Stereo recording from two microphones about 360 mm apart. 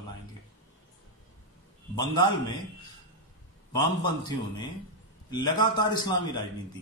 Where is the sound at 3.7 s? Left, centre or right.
Centre.